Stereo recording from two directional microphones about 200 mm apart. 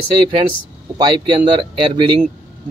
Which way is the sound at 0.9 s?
25° right (ahead or behind).